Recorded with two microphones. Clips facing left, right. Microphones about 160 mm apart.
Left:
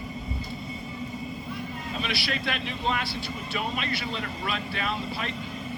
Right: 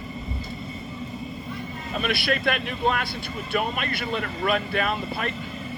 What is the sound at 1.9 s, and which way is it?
Speech, 55° right (ahead or behind).